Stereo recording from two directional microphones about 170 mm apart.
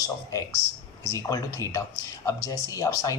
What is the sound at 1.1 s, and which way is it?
Speech, 20° left (ahead or behind).